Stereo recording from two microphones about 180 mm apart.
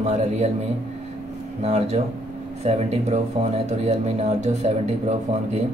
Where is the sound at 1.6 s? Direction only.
35° right (ahead or behind).